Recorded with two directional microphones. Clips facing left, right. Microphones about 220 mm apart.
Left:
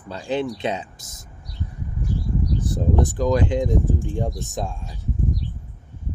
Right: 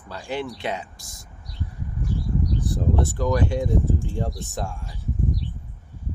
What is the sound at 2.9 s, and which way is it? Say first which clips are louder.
Speech: left 4 dB; 15° left (ahead or behind).